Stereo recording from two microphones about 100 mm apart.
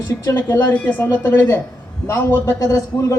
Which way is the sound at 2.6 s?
35° left (ahead or behind).